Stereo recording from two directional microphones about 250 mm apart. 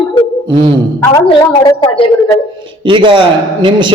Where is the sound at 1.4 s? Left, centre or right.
Centre.